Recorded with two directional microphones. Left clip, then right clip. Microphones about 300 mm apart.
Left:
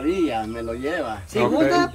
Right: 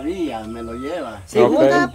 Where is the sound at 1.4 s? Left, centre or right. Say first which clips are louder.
Right 5 dB; centre.